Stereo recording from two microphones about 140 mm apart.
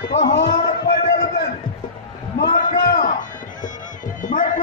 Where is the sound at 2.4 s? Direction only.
90° left.